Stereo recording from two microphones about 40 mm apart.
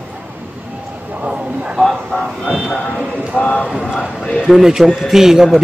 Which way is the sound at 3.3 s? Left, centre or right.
Left.